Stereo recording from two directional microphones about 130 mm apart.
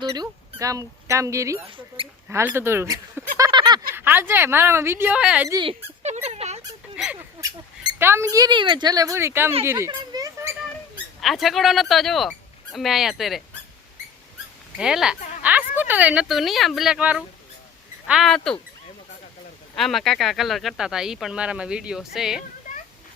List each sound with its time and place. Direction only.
0.1 s speech: 25° right (ahead or behind)
2.0 s rodents: 45° right (ahead or behind)
2.3 s speech: 15° right (ahead or behind)
3.3 s a sound: 30° right (ahead or behind)
3.9 s speech: 15° right (ahead or behind)
6.0 s a sound: 55° right (ahead or behind)
6.9 s a sound: 10° right (ahead or behind)
7.9 s speech: 20° right (ahead or behind)
10.1 s a sound: 25° right (ahead or behind)
11.2 s speech: centre (ahead or behind)
14.8 s speech: 5° right (ahead or behind)
19.7 s speech: centre (ahead or behind)